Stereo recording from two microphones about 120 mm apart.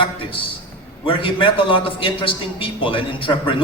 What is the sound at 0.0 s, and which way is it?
A man's voice, 45° left (ahead or behind).